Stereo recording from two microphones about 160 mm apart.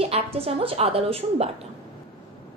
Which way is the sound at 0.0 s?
40° right (ahead or behind).